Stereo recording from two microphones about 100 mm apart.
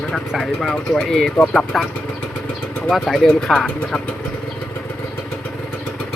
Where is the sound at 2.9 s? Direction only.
5° left (ahead or behind).